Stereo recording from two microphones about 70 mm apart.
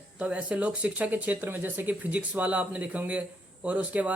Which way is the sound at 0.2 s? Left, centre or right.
Centre.